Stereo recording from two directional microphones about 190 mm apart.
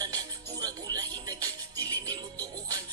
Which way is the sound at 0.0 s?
20° right (ahead or behind).